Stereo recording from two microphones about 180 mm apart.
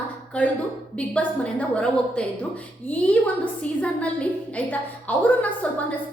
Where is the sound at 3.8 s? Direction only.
5° left (ahead or behind).